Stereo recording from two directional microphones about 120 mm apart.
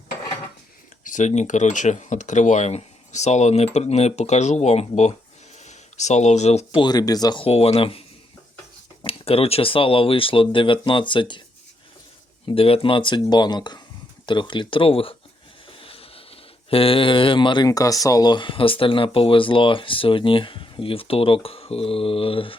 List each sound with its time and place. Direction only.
1.0 s speech: 85° left; by 6.7 s 65° left (ahead or behind)
6.7 s speech: 35° left (ahead or behind)
7.4 s speech: 55° left (ahead or behind)
9.0 s speech: 55° left (ahead or behind)
12.5 s speech: 50° left (ahead or behind)
15.7 s a sound: 50° left (ahead or behind)
17.7 s speech: 30° left (ahead or behind); by 22.5 s 50° left (ahead or behind)